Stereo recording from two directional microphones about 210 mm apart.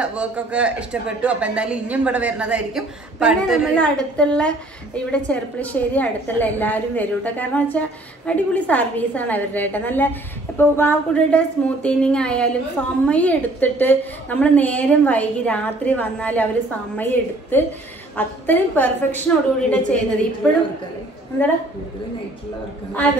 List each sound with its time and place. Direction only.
0.0 s a man's voice: 5° right (ahead or behind)